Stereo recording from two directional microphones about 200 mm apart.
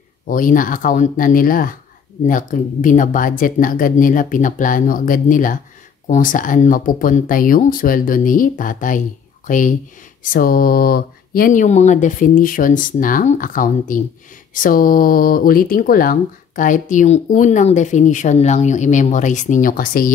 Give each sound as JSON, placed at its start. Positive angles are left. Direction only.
{"t": 0.3, "sound": "speech", "side_deg": 45}